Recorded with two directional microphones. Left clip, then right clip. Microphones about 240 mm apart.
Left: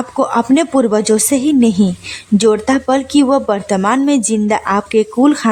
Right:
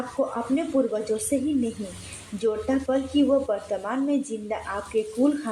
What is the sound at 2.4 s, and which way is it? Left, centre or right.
Speech, left.